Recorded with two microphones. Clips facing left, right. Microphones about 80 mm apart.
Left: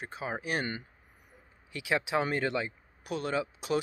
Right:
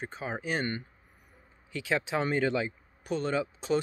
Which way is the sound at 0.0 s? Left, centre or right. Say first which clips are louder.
Right 1 dB; centre.